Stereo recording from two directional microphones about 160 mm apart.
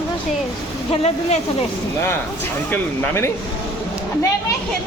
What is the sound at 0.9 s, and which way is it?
Speech, 40° left (ahead or behind).